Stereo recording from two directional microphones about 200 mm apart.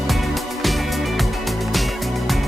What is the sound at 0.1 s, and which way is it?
Music, centre (ahead or behind).